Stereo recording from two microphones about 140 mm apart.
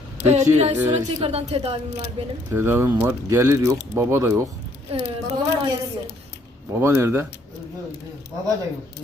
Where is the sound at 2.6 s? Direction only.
15° right (ahead or behind).